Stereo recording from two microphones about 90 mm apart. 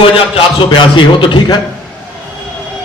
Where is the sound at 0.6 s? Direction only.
65° left (ahead or behind).